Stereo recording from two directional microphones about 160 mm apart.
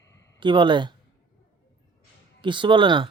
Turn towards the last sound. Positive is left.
turn(degrees=-30)  # may be behind; listen again after turning